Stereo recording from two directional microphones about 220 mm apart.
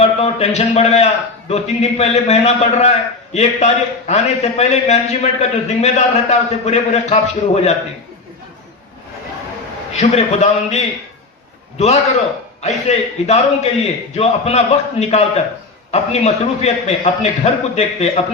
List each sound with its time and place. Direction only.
0.0 s a man's voice: 25° left (ahead or behind)
10.0 s a man's voice: 30° left (ahead or behind)
12.6 s a man's voice: 30° left (ahead or behind)